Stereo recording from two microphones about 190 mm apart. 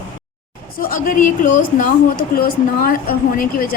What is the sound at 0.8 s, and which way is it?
A woman's voice, 45° left (ahead or behind).